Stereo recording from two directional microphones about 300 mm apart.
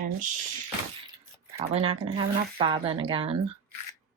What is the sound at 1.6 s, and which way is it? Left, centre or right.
Speech, centre.